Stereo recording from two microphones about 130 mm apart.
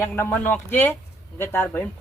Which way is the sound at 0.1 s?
15° left (ahead or behind).